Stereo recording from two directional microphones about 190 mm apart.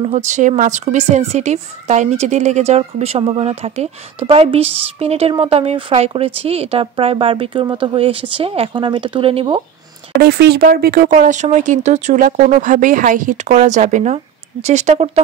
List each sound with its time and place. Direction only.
0.0 s a woman's voice: 35° right (ahead or behind)
10.1 s a woman's voice: 55° right (ahead or behind); by 15.2 s 35° right (ahead or behind)